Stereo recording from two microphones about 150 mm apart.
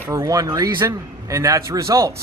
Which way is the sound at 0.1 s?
25° right (ahead or behind).